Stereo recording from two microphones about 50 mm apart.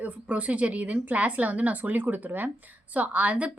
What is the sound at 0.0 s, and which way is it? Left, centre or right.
A woman's voice, right.